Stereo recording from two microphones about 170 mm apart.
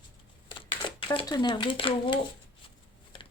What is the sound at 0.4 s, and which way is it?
Speech, 30° left (ahead or behind).